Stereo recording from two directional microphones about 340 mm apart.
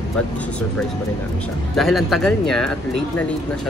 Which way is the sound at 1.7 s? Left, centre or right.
Centre.